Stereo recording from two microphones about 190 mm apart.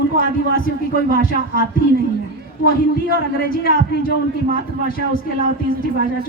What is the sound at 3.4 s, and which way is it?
Speech, 50° left (ahead or behind).